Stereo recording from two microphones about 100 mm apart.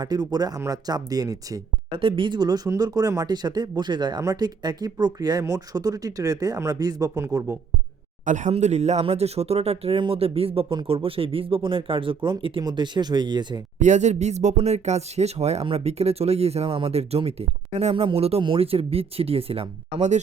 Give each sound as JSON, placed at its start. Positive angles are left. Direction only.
{"t": 0.0, "sound": "speech", "side_deg": -40}
{"t": 1.9, "sound": "speech", "side_deg": -60}
{"t": 8.5, "sound": "speech", "side_deg": -90}
{"t": 10.0, "sound": "speech", "side_deg": -70}
{"t": 12.6, "sound": "speech", "side_deg": -50}
{"t": 14.5, "sound": "speech", "side_deg": -90}
{"t": 18.4, "sound": "speech", "side_deg": -70}